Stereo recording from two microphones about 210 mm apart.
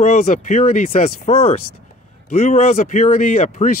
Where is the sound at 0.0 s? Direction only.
35° left (ahead or behind).